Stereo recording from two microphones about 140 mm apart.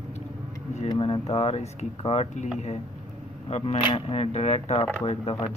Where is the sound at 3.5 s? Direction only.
45° left (ahead or behind).